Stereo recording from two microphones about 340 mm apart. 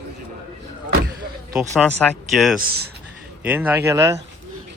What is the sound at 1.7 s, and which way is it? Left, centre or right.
Speech, centre.